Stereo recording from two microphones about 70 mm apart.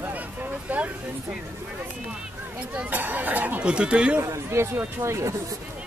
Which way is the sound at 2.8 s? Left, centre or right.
Right.